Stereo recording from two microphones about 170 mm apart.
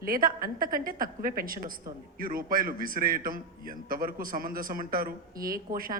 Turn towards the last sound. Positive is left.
turn(degrees=-55)  # may be behind; listen again after turning